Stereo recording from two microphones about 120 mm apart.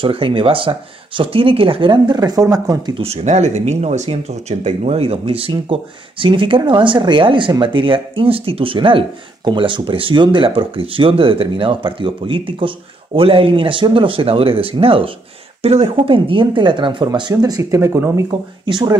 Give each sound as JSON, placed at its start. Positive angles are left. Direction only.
{"t": 0.0, "sound": "speech", "side_deg": -50}
{"t": 3.0, "sound": "speech", "side_deg": -60}
{"t": 18.7, "sound": "speech", "side_deg": -40}